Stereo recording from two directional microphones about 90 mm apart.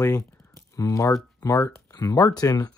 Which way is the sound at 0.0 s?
35° left (ahead or behind).